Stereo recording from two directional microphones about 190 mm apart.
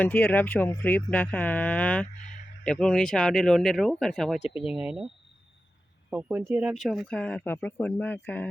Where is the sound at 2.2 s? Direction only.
40° left (ahead or behind).